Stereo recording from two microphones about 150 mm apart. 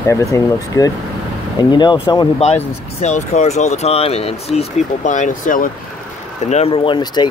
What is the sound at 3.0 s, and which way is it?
Speech, 50° left (ahead or behind).